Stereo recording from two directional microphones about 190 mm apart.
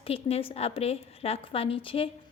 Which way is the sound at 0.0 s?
30° left (ahead or behind).